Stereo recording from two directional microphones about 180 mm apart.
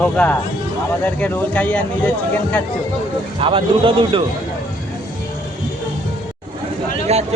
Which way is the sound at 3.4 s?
30° right (ahead or behind).